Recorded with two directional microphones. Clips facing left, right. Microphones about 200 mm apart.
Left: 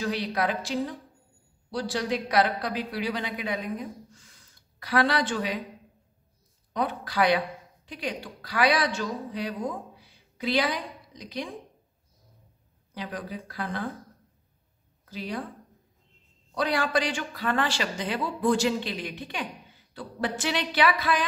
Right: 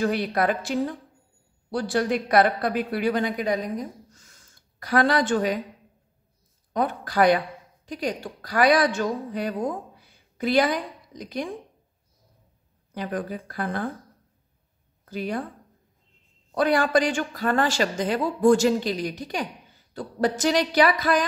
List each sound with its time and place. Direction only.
0.0 s speech: 50° right (ahead or behind)
6.7 s a woman's voice: 50° right (ahead or behind)
12.9 s speech: 50° right (ahead or behind)
15.0 s speech: 50° right (ahead or behind)
16.5 s speech: 50° right (ahead or behind)
19.9 s a sound: 45° right (ahead or behind)